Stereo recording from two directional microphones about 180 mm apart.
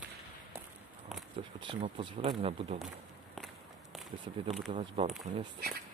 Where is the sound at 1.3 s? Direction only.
30° right (ahead or behind).